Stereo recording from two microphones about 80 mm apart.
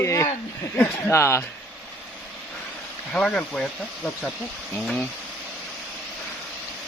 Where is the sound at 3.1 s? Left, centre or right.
Centre.